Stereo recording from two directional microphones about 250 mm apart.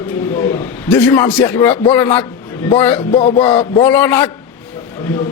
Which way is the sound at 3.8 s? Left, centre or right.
Centre.